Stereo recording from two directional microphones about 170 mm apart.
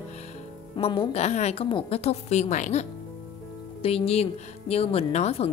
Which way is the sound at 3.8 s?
35° left (ahead or behind).